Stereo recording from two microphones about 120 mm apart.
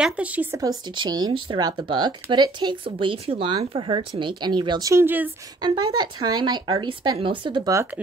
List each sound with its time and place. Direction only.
0.0 s speech: 10° right (ahead or behind)
0.6 s speech: 35° right (ahead or behind)
4.8 s speech: 20° right (ahead or behind)
5.6 s speech: 35° right (ahead or behind)